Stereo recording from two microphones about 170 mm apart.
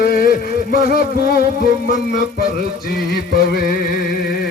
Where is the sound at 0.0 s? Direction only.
60° left (ahead or behind).